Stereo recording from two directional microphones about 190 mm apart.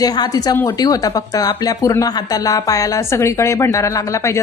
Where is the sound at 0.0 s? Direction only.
20° left (ahead or behind).